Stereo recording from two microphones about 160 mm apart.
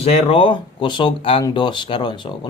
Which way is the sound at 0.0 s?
40° left (ahead or behind).